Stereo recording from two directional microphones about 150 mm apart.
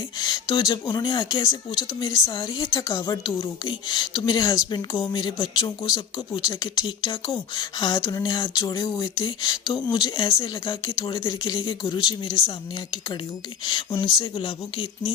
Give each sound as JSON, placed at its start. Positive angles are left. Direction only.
{"t": 0.2, "sound": "speech", "side_deg": 30}
{"t": 13.7, "sound": "speech", "side_deg": 30}